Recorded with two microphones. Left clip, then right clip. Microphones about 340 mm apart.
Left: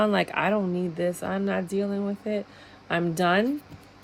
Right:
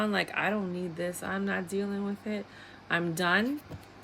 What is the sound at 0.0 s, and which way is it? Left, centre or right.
Speech, centre.